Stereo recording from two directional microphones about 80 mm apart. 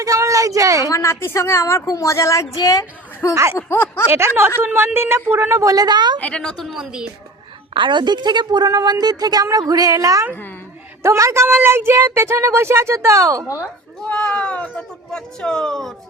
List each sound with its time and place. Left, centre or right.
0.0 s a sound: right
0.9 s a woman's voice: left
3.2 s a woman's voice: left
4.1 s speech: right
5.7 s a woman's voice: right
6.1 s speech: centre
6.7 s a woman's voice: centre
7.7 s a woman's voice: right
14.0 s speech: centre